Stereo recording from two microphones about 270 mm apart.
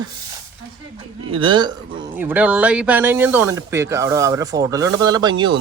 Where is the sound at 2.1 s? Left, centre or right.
Centre.